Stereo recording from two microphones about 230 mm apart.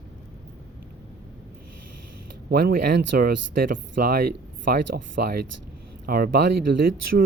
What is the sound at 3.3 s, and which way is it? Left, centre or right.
Speech, right.